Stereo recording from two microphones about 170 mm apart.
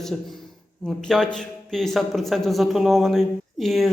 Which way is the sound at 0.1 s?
Centre (ahead or behind).